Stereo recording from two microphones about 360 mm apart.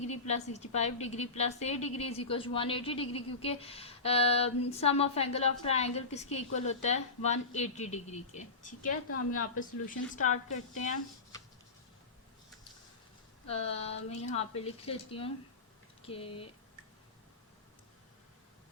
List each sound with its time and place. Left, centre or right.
0.1 s a woman's voice: centre
9.0 s a woman's voice: left
9.6 s speech: left
13.5 s a woman's voice: centre